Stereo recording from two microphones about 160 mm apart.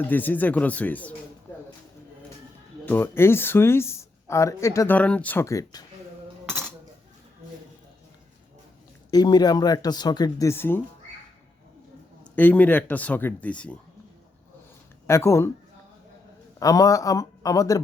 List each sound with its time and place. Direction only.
0.0 s speech: 10° left (ahead or behind)
2.8 s speech: 15° left (ahead or behind)
9.0 s speech: 25° left (ahead or behind)
12.2 s speech: 10° left (ahead or behind)
15.0 s speech: 15° left (ahead or behind)
16.6 s speech: 20° left (ahead or behind)